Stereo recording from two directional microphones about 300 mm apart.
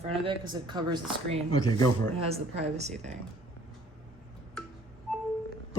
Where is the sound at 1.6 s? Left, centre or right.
Centre.